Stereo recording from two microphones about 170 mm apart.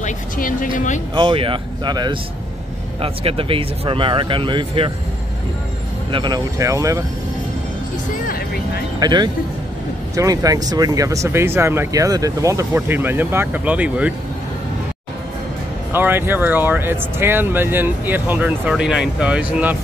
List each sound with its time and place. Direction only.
0.0 s speech: 50° left (ahead or behind)
1.1 s speech: 30° right (ahead or behind)
6.1 s speech: 25° right (ahead or behind)
9.0 s speech: 25° right (ahead or behind); by 14.1 s 5° right (ahead or behind)
15.9 s speech: 10° right (ahead or behind)